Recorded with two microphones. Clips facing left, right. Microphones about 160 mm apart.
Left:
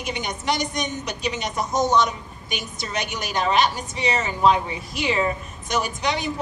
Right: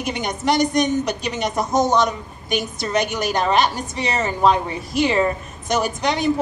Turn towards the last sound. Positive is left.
turn(degrees=-50)  # may be behind; listen again after turning